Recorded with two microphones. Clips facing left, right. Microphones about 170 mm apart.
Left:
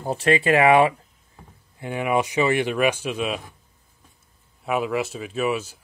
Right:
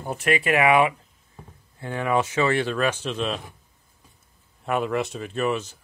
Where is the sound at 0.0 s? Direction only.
30° left (ahead or behind).